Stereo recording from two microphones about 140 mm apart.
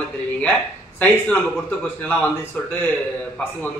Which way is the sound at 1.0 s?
10° left (ahead or behind).